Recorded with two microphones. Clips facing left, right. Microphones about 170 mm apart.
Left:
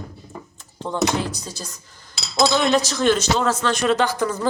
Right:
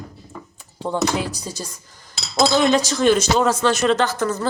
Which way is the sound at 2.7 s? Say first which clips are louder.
Right 2 dB; 10° right (ahead or behind).